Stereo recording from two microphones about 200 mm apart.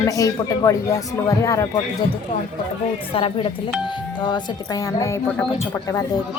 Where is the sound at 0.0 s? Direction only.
15° left (ahead or behind).